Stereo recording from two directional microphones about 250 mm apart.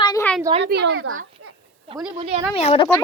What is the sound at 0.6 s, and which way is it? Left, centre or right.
Speech, right.